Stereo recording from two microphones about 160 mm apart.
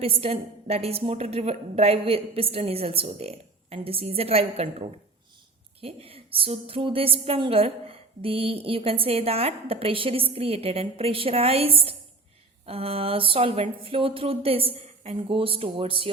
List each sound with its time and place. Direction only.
0.0 s a woman's voice: 40° right (ahead or behind)